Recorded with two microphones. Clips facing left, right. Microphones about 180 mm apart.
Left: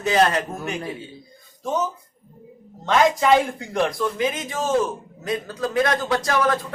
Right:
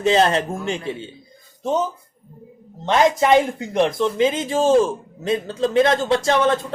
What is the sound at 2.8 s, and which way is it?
Speech, 25° right (ahead or behind).